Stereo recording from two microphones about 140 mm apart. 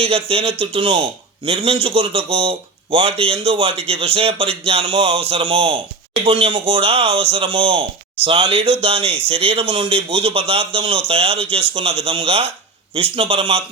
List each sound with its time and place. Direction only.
0.0 s a man's voice: 40° right (ahead or behind)